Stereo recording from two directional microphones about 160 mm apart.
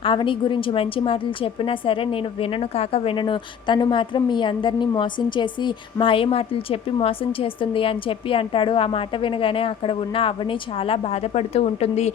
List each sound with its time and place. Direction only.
0.0 s a woman's voice: 30° left (ahead or behind)